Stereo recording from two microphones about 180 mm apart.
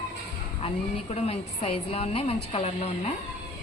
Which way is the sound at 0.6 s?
35° left (ahead or behind).